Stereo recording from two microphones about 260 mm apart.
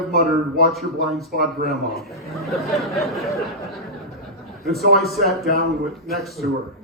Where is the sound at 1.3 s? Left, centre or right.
Right.